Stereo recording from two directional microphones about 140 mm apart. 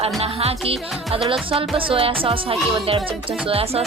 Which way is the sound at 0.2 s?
45° right (ahead or behind).